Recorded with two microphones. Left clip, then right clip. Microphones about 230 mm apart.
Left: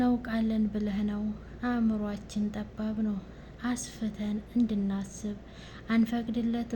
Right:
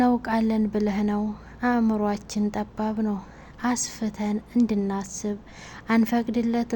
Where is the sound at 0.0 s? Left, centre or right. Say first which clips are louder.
Right 7 dB; right.